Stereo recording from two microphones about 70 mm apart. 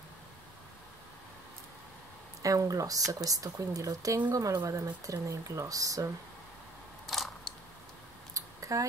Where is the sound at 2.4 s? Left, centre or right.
Right.